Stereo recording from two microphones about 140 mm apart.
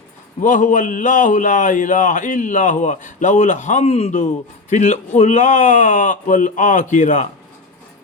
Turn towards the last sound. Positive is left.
turn(degrees=65)  # may be behind; listen again after turning